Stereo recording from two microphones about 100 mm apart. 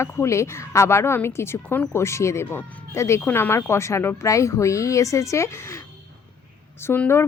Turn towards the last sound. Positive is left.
turn(degrees=20)  # may be behind; listen again after turning